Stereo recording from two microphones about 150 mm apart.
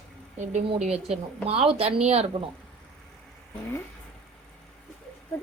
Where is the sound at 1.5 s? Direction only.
40° right (ahead or behind).